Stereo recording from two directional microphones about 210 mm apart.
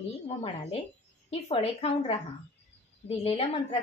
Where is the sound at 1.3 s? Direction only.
30° left (ahead or behind).